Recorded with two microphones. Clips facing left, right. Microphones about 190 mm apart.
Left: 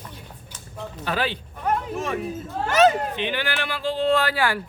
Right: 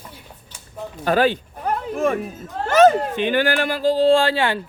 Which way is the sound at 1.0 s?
45° right (ahead or behind).